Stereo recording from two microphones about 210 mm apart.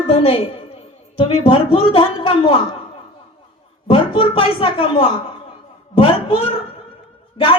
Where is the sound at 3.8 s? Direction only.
25° left (ahead or behind).